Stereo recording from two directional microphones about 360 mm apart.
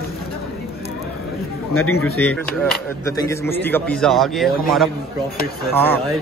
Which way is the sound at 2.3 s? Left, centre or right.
Centre.